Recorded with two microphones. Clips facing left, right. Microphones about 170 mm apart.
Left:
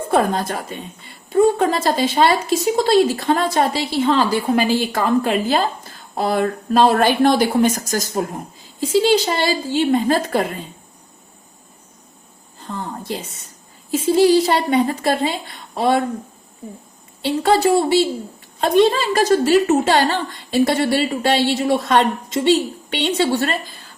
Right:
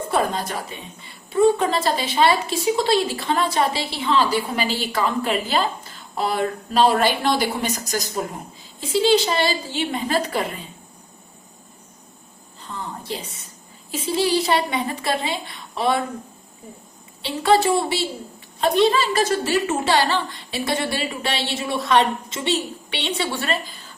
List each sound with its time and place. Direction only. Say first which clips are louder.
0.1 s a woman's voice: left 5 dB; 50° left (ahead or behind)
12.5 s a sound: left 4 dB; 50° left (ahead or behind)
13.9 s a woman's voice: left 8 dB; 45° left (ahead or behind)
17.2 s a woman's voice: left 3 dB; 45° left (ahead or behind)